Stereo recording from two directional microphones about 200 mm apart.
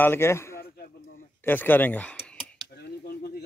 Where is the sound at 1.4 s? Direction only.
10° left (ahead or behind).